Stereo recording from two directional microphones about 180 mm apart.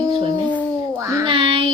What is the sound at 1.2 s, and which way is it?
Child singing, 30° right (ahead or behind).